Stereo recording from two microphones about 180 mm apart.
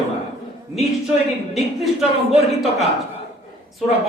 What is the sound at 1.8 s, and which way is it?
Speech, centre (ahead or behind).